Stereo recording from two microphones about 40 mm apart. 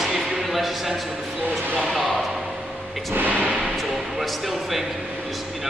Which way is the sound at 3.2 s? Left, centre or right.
Right.